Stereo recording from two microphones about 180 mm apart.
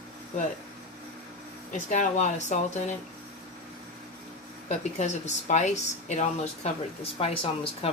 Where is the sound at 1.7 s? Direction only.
45° left (ahead or behind).